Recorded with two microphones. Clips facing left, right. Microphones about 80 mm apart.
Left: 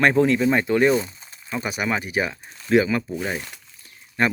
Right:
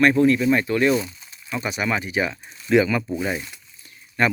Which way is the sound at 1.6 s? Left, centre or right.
Centre.